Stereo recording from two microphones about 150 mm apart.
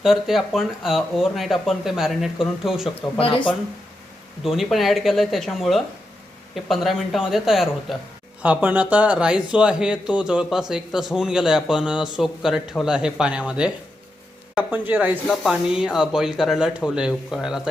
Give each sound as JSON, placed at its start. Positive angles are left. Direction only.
{"t": 0.0, "sound": "speech", "side_deg": 0}
{"t": 2.9, "sound": "speech", "side_deg": 40}
{"t": 4.4, "sound": "speech", "side_deg": 0}